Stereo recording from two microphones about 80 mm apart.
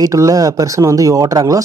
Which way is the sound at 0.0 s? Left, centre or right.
Right.